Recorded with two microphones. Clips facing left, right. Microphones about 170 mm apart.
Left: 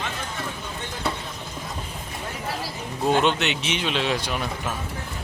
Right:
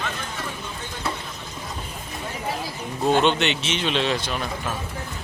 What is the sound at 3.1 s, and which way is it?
A man's voice, 5° left (ahead or behind).